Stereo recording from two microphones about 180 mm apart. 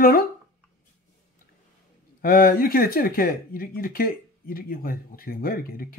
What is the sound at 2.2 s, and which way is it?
A woman's voice, 55° left (ahead or behind).